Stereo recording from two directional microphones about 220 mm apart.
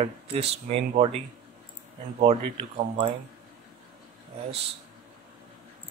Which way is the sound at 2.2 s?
30° right (ahead or behind).